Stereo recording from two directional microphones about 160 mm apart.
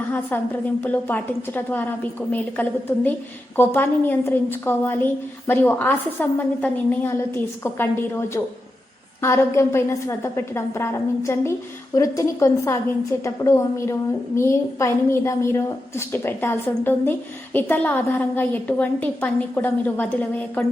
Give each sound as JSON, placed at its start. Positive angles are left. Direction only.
{"t": 0.1, "sound": "a woman's voice", "side_deg": 10}
{"t": 9.2, "sound": "a woman's voice", "side_deg": 15}